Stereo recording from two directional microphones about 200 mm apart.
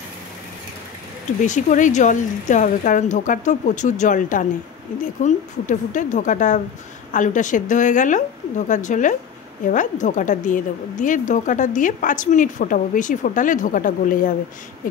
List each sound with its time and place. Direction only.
1.4 s a woman's voice: 40° left (ahead or behind)